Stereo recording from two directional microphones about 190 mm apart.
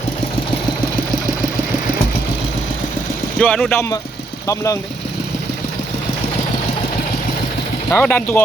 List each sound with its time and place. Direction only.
3.3 s speech: 5° left (ahead or behind)
4.4 s speech: 15° left (ahead or behind)
7.9 s speech: 5° left (ahead or behind)